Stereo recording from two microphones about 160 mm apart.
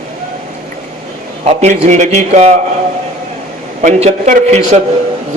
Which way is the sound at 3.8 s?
45° right (ahead or behind).